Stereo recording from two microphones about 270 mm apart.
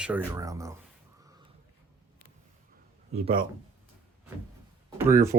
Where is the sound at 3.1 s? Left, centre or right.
Right.